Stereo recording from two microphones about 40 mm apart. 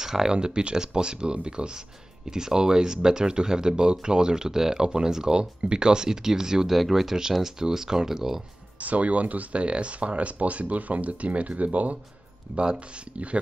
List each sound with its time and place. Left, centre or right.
0.0 s speech: centre
8.7 s speech: right